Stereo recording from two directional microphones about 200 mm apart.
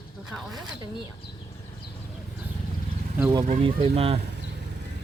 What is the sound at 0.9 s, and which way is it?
Speech, 25° left (ahead or behind).